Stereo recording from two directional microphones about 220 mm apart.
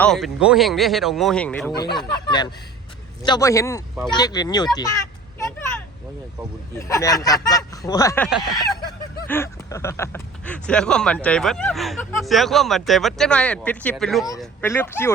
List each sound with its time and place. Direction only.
0.0 s speech: centre (ahead or behind)
1.7 s speech: 20° left (ahead or behind)
6.7 s speech: 15° left (ahead or behind)
14.3 s speech: 10° left (ahead or behind)